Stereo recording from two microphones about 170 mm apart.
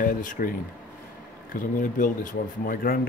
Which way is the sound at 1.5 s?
50° left (ahead or behind).